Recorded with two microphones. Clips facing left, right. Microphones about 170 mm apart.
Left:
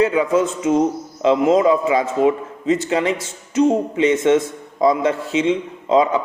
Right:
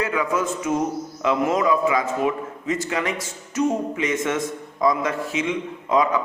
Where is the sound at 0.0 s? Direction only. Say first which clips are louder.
Left 7 dB; 25° left (ahead or behind).